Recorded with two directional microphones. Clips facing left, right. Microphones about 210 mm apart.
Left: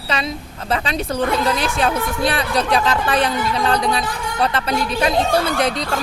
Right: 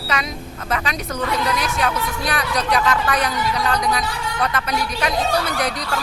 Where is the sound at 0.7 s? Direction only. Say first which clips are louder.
Left 4 dB; 30° left (ahead or behind).